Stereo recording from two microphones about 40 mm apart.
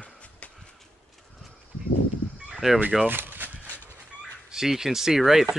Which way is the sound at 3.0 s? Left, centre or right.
Right.